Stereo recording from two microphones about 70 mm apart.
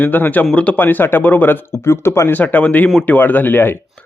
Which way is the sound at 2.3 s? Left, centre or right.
Left.